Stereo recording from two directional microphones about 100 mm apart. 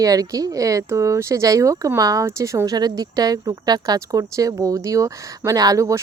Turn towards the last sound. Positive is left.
turn(degrees=-30)  # may be behind; listen again after turning